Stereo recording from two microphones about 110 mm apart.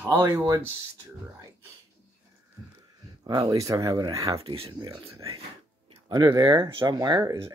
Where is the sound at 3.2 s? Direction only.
35° right (ahead or behind).